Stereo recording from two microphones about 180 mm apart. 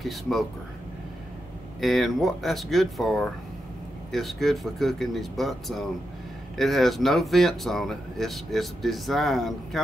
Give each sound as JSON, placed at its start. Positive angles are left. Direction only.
{"t": 0.0, "sound": "speech", "side_deg": 0}
{"t": 1.8, "sound": "speech", "side_deg": 0}